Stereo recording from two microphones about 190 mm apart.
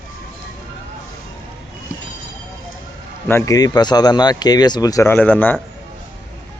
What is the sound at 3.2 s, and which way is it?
A man's voice, 15° left (ahead or behind).